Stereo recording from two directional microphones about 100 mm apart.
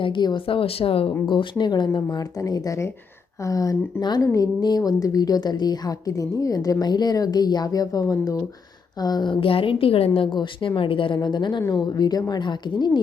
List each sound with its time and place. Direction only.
0.0 s a woman's voice: 50° left (ahead or behind)
0.4 s a woman's voice: 70° left (ahead or behind)
1.3 s a woman's voice: 50° left (ahead or behind)
2.0 s a woman's voice: 40° left (ahead or behind); by 10.1 s 70° left (ahead or behind)
10.2 s a woman's voice: 55° left (ahead or behind)